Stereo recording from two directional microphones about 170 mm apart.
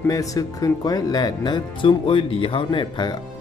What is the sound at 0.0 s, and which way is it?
Speech, 20° left (ahead or behind).